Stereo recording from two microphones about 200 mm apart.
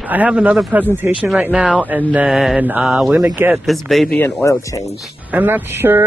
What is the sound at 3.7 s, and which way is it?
Speech, centre (ahead or behind).